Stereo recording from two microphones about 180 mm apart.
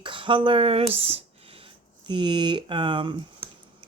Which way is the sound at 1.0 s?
30° right (ahead or behind).